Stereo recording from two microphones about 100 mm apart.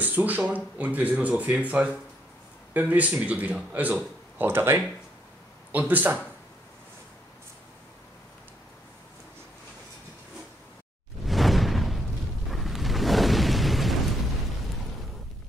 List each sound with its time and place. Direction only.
0.0 s speech: 15° right (ahead or behind)
11.2 s whoosh: centre (ahead or behind)
12.4 s eruption: centre (ahead or behind)